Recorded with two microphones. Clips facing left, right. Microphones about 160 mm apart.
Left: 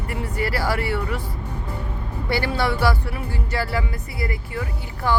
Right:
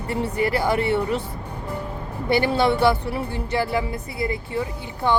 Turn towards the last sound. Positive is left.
turn(degrees=-25)  # may be behind; listen again after turning